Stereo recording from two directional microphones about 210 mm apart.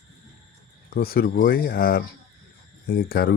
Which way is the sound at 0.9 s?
45° left (ahead or behind).